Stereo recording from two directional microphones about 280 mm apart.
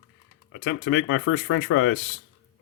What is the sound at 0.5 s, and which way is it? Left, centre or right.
Speech, left.